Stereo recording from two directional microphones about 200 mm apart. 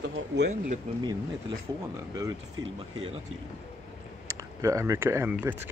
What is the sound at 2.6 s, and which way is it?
Speech, 75° right (ahead or behind).